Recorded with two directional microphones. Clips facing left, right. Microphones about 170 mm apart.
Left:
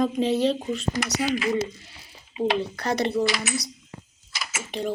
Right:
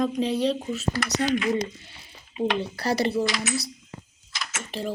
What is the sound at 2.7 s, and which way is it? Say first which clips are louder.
Speech: right 1 dB; 35° right (ahead or behind).